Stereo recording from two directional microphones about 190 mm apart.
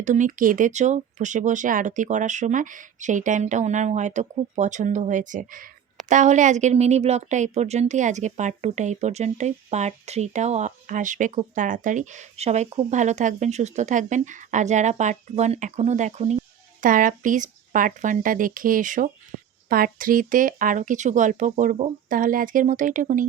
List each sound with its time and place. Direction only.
0.0 s speech: 40° right (ahead or behind)